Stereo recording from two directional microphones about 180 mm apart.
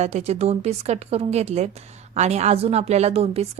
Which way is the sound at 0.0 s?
40° right (ahead or behind).